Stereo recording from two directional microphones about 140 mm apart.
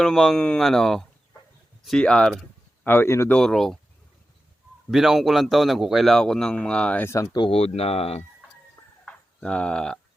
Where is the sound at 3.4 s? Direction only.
5° left (ahead or behind).